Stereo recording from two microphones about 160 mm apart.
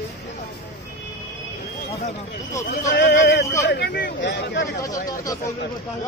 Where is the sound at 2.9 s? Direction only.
70° left (ahead or behind).